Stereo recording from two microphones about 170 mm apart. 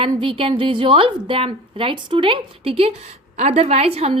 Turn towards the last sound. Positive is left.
turn(degrees=-35)  # may be behind; listen again after turning